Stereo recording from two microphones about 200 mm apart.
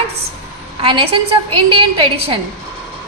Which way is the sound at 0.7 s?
30° right (ahead or behind).